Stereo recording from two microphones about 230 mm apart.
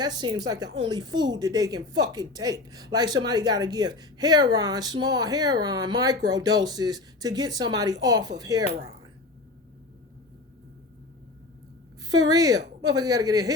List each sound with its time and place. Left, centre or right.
0.0 s speech: centre
12.0 s speech: centre